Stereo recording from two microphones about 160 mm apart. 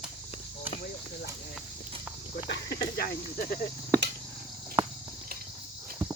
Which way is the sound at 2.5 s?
90° left.